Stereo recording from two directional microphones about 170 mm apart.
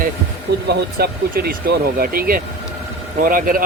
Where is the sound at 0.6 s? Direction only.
65° right (ahead or behind).